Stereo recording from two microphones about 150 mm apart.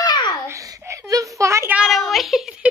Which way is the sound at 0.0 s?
30° left (ahead or behind).